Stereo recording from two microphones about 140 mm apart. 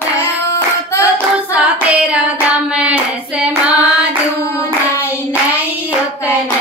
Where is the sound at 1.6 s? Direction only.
10° right (ahead or behind).